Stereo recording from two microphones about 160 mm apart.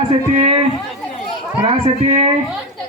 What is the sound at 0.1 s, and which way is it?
Speech, 40° right (ahead or behind).